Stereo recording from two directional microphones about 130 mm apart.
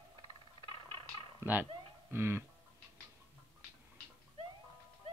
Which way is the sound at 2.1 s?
20° right (ahead or behind).